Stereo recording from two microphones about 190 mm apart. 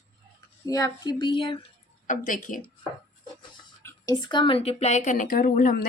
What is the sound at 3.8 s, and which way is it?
Speech, 15° left (ahead or behind).